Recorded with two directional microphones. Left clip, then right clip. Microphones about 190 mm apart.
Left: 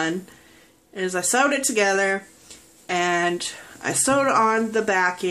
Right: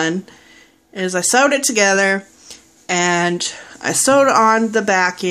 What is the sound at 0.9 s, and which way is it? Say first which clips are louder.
Speech: right 6 dB; 35° right (ahead or behind).